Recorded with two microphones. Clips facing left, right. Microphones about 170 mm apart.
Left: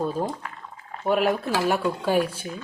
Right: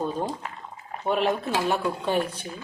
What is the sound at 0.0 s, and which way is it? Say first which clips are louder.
Speech: left 2 dB; 5° left (ahead or behind).